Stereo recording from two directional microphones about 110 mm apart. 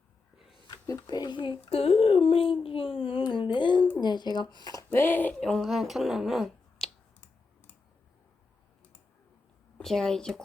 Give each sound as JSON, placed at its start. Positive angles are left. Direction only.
{"t": 0.9, "sound": "a child's voice", "side_deg": 40}
{"t": 4.9, "sound": "speech", "side_deg": 20}
{"t": 9.7, "sound": "a woman's voice", "side_deg": 5}